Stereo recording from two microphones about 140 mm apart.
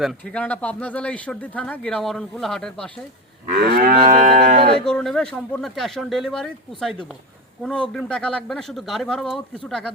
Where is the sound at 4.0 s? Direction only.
55° right (ahead or behind).